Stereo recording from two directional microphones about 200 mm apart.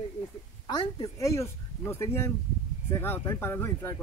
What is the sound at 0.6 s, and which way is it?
Speech, 20° left (ahead or behind).